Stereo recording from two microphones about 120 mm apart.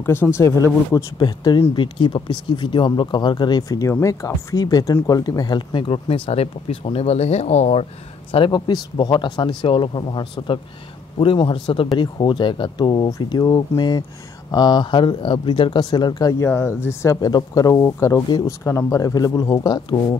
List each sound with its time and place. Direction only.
0.0 s speech: 20° left (ahead or behind)
0.9 s speech: 35° left (ahead or behind); by 7.8 s 60° left (ahead or behind)
8.3 s speech: 45° left (ahead or behind)
16.4 s speech: 20° left (ahead or behind)
17.9 s speech: 20° left (ahead or behind); by 20.0 s 35° left (ahead or behind)